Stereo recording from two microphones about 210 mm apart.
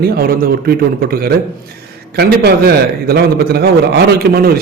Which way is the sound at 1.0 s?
45° right (ahead or behind).